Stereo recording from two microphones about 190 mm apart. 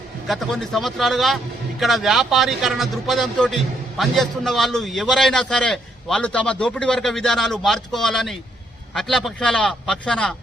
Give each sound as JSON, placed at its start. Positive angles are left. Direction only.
{"t": 0.3, "sound": "a man's voice", "side_deg": 0}